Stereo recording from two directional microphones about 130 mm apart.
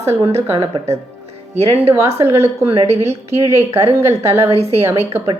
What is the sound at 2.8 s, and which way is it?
A woman's voice, 55° right (ahead or behind).